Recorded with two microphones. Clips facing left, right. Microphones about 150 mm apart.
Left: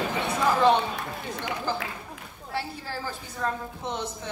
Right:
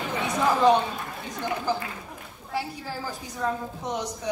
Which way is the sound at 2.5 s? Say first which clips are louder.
Right 1 dB; 15° right (ahead or behind).